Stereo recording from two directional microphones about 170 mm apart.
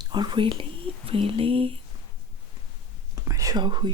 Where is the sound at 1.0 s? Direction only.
35° right (ahead or behind).